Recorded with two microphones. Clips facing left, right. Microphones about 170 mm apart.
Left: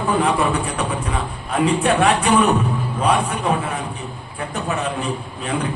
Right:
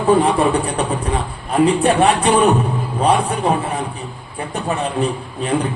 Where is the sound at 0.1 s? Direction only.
30° right (ahead or behind).